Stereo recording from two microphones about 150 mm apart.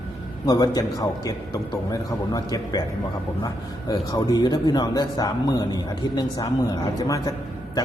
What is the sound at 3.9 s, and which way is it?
Speech, 25° left (ahead or behind).